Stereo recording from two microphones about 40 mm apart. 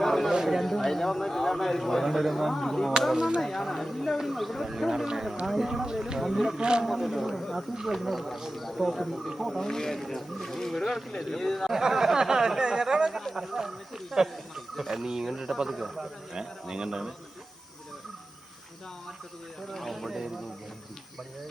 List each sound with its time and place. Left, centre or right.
0.0 s a sound: centre
0.4 s a man's voice: centre
6.6 s a man's voice: right
6.8 s speech: centre
8.0 s speech: centre
9.6 s speech: centre
11.7 s speech: centre
13.3 s speech: centre
16.3 s speech: centre
19.7 s speech: centre